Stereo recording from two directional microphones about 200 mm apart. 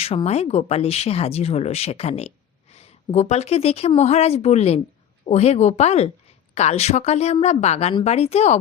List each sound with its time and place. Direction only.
0.0 s speech: 30° left (ahead or behind)